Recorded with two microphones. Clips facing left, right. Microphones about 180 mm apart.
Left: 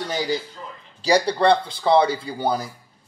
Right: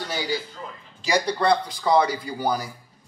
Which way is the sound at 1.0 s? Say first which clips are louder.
Left 4 dB; 35° left (ahead or behind).